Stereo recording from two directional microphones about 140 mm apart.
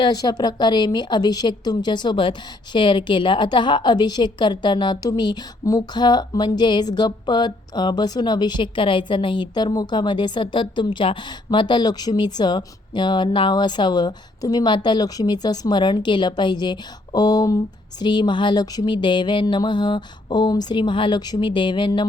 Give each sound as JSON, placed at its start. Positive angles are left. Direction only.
{"t": 0.0, "sound": "a woman's voice", "side_deg": 30}